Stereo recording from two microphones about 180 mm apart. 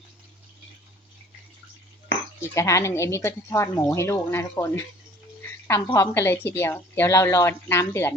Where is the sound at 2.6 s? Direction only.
15° left (ahead or behind).